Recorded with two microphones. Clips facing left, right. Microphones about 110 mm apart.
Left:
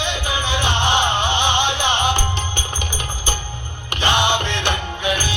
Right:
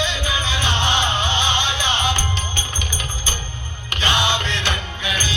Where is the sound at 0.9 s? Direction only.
55° left (ahead or behind).